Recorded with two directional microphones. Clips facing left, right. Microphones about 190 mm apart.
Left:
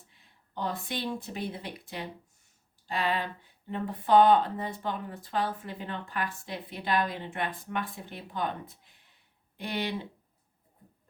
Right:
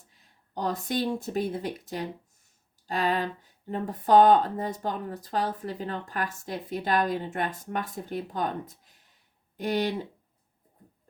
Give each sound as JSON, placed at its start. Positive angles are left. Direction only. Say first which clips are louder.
{"t": 0.1, "sound": "speech", "louder": "right 4 dB", "side_deg": -40}